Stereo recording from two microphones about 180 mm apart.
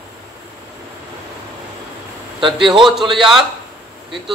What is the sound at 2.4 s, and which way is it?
Speech, 25° right (ahead or behind).